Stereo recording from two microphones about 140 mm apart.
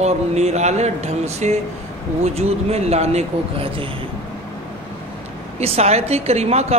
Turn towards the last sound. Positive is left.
turn(degrees=-50)  # may be behind; listen again after turning